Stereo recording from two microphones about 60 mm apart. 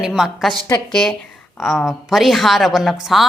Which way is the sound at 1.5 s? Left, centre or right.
Centre.